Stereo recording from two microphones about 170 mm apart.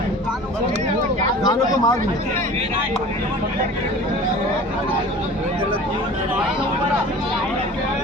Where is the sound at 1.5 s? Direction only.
20° left (ahead or behind).